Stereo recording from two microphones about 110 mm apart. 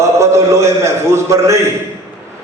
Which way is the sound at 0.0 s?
25° right (ahead or behind).